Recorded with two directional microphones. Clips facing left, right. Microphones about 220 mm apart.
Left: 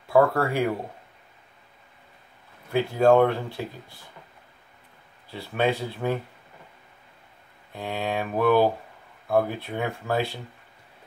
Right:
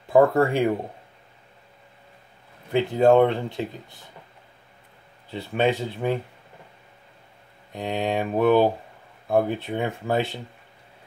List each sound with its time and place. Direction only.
0.1 s speech: 15° right (ahead or behind)
2.7 s speech: 20° right (ahead or behind)
5.3 s speech: 15° right (ahead or behind)
7.7 s speech: 15° right (ahead or behind)